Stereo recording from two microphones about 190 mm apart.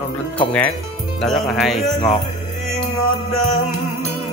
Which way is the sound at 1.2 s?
Centre (ahead or behind).